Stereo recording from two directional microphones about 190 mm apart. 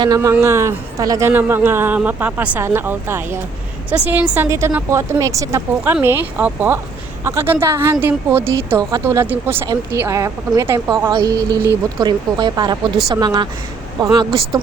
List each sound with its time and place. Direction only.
0.0 s speech: 20° right (ahead or behind)